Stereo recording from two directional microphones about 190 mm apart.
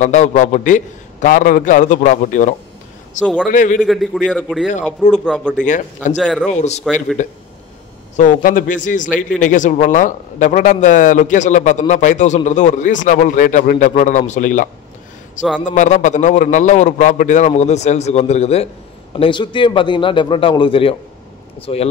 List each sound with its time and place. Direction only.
0.0 s a man's voice: 40° left (ahead or behind)
3.7 s a man's voice: centre (ahead or behind)
6.5 s a man's voice: 35° left (ahead or behind)
6.8 s a man's voice: centre (ahead or behind)
8.2 s a man's voice: 45° left (ahead or behind)